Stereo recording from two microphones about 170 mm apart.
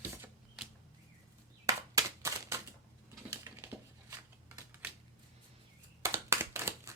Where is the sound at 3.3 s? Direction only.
20° right (ahead or behind).